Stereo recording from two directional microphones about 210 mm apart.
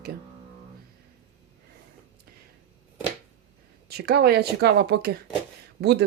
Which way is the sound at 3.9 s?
50° right (ahead or behind).